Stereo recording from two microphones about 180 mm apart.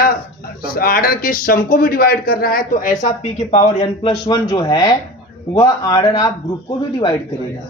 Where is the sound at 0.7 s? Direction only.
55° left (ahead or behind).